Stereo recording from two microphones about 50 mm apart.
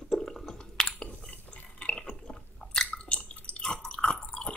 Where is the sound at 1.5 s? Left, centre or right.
Left.